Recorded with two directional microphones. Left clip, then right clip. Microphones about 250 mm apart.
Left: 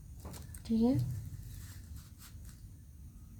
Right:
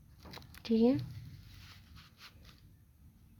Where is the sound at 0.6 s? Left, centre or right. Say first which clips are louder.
Right 3 dB; right.